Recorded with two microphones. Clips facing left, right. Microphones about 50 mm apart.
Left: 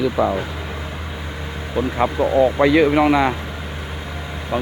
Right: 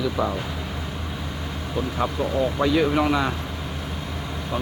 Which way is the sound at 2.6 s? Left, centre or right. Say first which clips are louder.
Left 4 dB; left.